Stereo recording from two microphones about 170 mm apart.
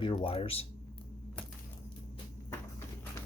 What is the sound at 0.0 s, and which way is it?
Speech, 30° left (ahead or behind).